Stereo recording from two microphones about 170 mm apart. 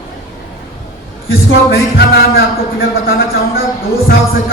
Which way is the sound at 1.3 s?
65° left (ahead or behind).